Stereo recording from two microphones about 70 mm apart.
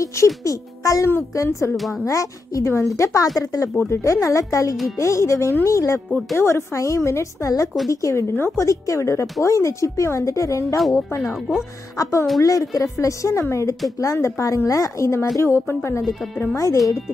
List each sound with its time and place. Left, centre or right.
0.0 s speech: left
1.8 s speech: centre
2.0 s speech: left
10.8 s speech: centre
11.1 s speech: left
12.4 s speech: left
15.4 s a woman's voice: left
16.5 s speech: left